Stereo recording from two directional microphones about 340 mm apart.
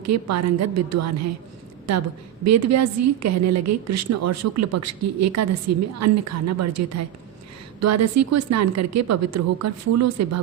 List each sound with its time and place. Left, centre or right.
0.0 s a woman's voice: right